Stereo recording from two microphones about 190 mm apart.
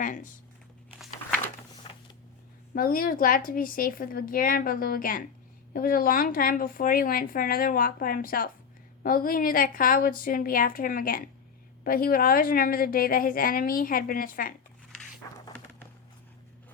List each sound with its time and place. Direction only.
0.0 s speech: 45° left (ahead or behind)
2.7 s speech: 50° left (ahead or behind)
14.9 s a sound: 5° left (ahead or behind)